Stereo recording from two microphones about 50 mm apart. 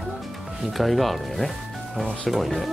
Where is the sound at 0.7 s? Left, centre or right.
Centre.